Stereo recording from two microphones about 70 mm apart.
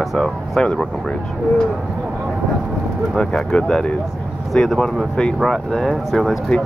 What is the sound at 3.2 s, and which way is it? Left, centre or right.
Speech, centre.